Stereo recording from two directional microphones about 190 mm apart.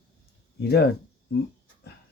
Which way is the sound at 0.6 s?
55° left (ahead or behind).